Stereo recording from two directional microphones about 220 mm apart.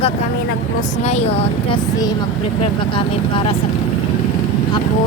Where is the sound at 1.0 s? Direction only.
30° left (ahead or behind).